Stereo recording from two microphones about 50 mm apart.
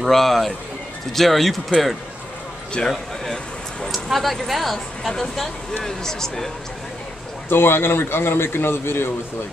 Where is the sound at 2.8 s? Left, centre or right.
Centre.